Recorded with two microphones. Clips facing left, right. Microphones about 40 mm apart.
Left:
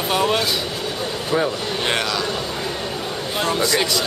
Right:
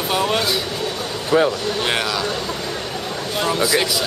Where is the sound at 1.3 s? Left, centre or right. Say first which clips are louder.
Right 5 dB; centre.